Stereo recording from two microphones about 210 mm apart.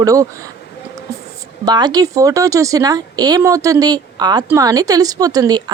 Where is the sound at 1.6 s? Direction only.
20° right (ahead or behind).